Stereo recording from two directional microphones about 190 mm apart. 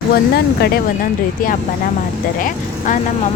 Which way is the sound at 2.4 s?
45° left (ahead or behind).